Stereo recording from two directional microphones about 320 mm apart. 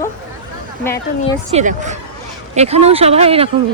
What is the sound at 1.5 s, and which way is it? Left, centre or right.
Speech, right.